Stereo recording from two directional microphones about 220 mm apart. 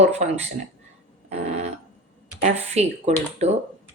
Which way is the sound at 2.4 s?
30° right (ahead or behind).